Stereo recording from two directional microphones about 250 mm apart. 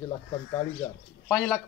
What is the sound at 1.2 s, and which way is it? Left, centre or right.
Speech, centre.